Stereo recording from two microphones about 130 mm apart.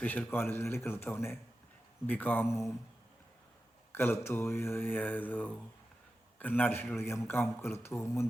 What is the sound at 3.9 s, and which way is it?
A man's voice, 15° left (ahead or behind).